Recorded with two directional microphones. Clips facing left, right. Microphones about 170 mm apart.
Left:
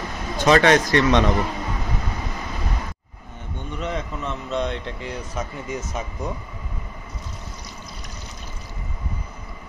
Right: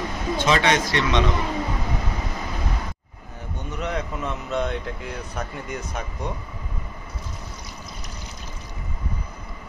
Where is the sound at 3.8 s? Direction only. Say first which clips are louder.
Right 1 dB; centre (ahead or behind).